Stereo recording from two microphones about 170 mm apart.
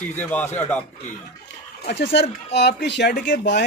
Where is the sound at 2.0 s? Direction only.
90° left.